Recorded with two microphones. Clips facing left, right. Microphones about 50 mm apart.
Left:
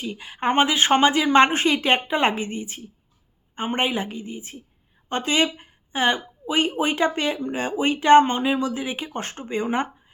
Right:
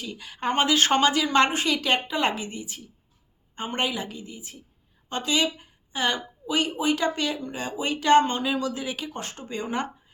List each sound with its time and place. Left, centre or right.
0.0 s speech: left